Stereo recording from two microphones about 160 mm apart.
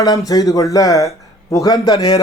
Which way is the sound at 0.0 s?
20° left (ahead or behind).